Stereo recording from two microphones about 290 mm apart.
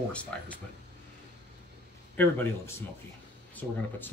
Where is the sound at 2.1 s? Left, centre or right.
Centre.